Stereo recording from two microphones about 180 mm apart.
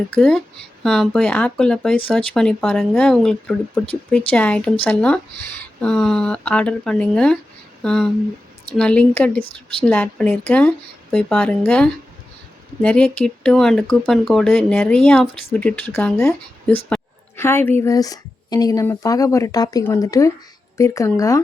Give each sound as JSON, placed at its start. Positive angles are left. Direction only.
{"t": 0.1, "sound": "a woman's voice", "side_deg": 0}